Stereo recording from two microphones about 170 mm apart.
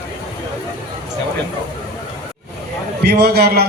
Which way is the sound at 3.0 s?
70° right (ahead or behind).